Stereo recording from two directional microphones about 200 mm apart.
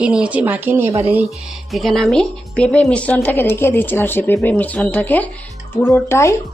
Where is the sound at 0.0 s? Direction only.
5° right (ahead or behind).